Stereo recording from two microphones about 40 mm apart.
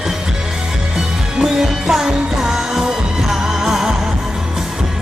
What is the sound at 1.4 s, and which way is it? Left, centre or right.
Music, centre.